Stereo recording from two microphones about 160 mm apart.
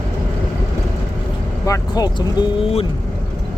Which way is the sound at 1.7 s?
25° left (ahead or behind).